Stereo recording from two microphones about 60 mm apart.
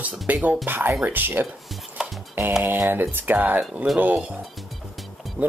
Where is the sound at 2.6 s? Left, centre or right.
Right.